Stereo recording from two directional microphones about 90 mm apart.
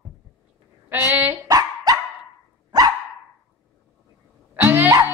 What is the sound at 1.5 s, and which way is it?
Dog, 45° right (ahead or behind).